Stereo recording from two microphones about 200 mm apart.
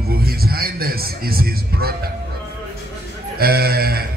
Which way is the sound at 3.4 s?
50° right (ahead or behind).